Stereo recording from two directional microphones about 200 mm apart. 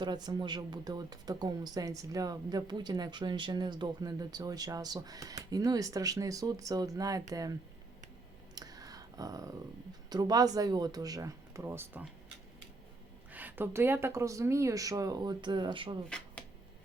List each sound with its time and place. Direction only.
0.0 s speech: 20° right (ahead or behind)
8.5 s a sound: 20° right (ahead or behind)
10.1 s speech: 20° right (ahead or behind)
13.3 s speech: 10° right (ahead or behind); by 16.0 s 25° right (ahead or behind)
16.0 s shuffling cards: 5° left (ahead or behind)